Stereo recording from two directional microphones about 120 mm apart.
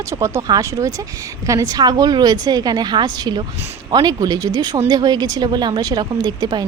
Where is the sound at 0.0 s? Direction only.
25° right (ahead or behind).